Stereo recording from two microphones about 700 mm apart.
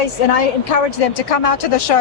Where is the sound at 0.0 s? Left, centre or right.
Left.